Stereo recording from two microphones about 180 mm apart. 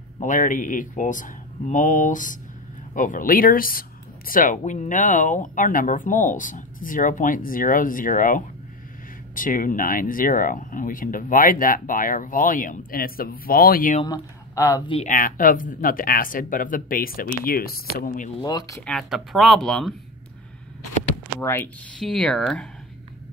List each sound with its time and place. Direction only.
0.2 s speech: 45° left (ahead or behind)
14.0 s speech: 20° left (ahead or behind)
15.0 s speech: 50° left (ahead or behind)
18.4 s speech: 20° left (ahead or behind)
18.8 s speech: 5° left (ahead or behind)
21.4 s speech: 15° left (ahead or behind)